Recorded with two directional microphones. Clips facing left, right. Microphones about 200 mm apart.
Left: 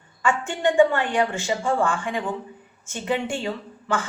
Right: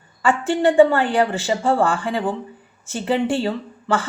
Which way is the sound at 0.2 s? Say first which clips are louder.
Right 5 dB; 35° right (ahead or behind).